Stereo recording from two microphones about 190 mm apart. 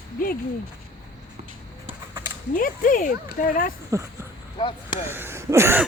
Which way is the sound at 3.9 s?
15° right (ahead or behind).